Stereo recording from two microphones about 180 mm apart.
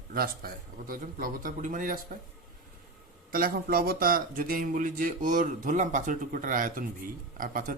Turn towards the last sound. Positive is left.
turn(degrees=-50)  # may be behind; listen again after turning